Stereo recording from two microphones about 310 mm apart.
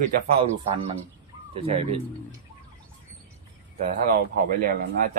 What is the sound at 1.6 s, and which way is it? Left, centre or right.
Speech, centre.